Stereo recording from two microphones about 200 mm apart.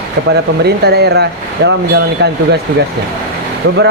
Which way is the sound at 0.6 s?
55° right (ahead or behind).